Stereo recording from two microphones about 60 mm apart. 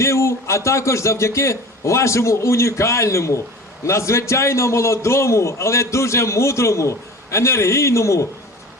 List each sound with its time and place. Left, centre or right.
0.0 s a man's voice: left